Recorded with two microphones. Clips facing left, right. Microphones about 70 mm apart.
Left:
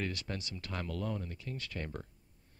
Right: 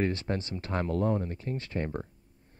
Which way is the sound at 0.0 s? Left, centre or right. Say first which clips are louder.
Right 9 dB; right.